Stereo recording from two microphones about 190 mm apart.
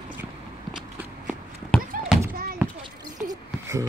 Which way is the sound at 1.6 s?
Centre (ahead or behind).